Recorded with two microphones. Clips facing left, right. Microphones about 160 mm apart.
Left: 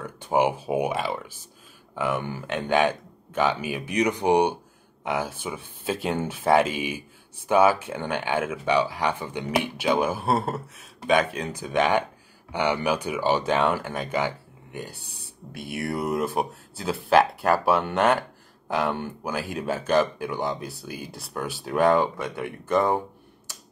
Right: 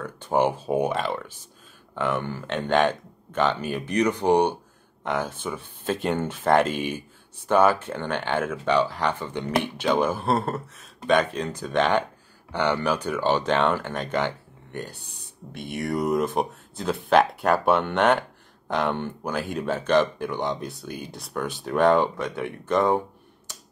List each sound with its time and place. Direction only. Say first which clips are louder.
0.2 s speech: even; 10° left (ahead or behind)